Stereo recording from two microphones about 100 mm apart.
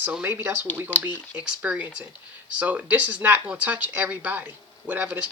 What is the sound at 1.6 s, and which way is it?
Speech, 10° right (ahead or behind).